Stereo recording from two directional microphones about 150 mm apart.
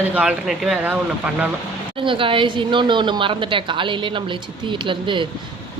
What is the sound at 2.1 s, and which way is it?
A woman's voice, 35° right (ahead or behind).